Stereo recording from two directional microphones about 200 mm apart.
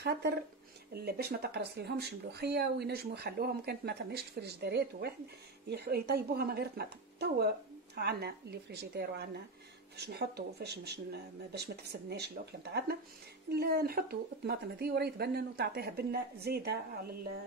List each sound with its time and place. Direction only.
0.0 s speech: 55° right (ahead or behind)